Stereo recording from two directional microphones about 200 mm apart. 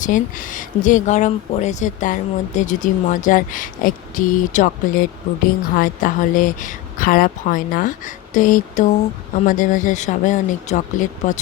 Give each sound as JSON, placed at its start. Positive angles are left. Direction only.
{"t": 0.0, "sound": "speech", "side_deg": 40}